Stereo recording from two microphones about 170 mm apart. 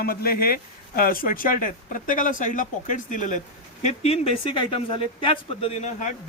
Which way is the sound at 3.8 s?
35° left (ahead or behind).